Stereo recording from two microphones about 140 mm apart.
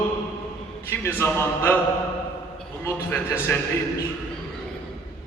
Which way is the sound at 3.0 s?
15° left (ahead or behind).